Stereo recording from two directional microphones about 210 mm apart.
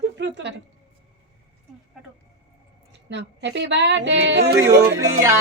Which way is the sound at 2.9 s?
55° right (ahead or behind).